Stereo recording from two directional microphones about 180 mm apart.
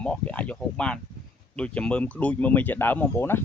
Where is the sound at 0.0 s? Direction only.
5° left (ahead or behind).